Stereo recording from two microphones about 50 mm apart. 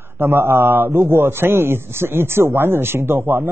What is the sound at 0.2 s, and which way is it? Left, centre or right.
A man's voice, right.